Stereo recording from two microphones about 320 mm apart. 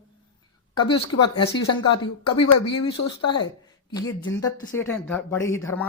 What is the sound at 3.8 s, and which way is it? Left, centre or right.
Speech, centre.